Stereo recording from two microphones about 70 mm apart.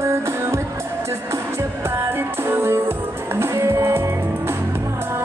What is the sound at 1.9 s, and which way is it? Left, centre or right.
Music, right.